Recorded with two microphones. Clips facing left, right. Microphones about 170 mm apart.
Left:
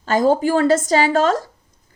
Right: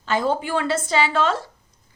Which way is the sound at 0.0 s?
45° left (ahead or behind).